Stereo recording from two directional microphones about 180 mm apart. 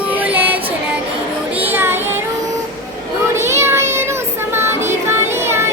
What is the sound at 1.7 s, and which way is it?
Child singing, 10° right (ahead or behind).